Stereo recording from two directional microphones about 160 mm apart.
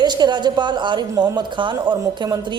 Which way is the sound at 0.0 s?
25° right (ahead or behind).